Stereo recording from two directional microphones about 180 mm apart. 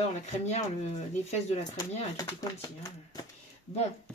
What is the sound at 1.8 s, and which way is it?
Speech, 15° left (ahead or behind).